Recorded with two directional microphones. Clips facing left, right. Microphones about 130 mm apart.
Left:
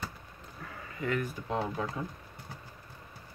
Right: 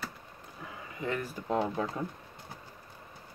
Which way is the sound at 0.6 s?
25° right (ahead or behind).